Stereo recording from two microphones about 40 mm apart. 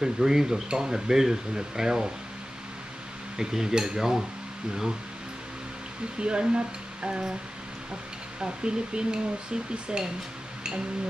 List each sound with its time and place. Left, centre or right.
0.0 s speech: centre
3.3 s speech: centre
6.1 s speech: right
8.4 s speech: right